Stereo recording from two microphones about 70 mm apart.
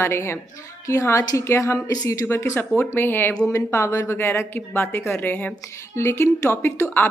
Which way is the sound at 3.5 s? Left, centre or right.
Left.